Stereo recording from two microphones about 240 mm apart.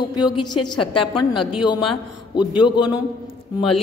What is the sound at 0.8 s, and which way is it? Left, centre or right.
Speech, left.